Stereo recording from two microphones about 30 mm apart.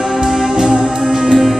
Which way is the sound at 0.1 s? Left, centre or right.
Right.